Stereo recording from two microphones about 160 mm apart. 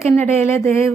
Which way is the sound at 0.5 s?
15° left (ahead or behind).